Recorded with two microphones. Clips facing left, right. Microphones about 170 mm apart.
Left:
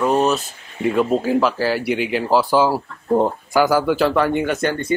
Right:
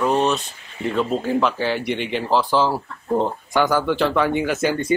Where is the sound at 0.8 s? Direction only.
10° left (ahead or behind).